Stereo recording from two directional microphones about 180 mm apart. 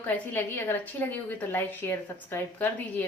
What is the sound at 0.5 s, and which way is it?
A woman's voice, 10° left (ahead or behind).